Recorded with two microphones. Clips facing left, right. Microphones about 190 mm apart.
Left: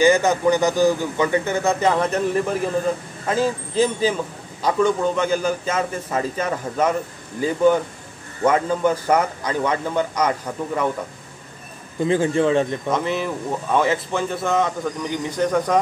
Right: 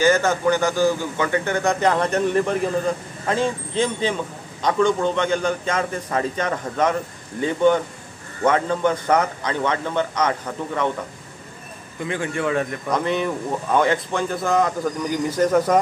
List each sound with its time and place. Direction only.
0.0 s a man's voice: 10° left (ahead or behind)
12.0 s a man's voice: 30° left (ahead or behind)
12.9 s speech: centre (ahead or behind)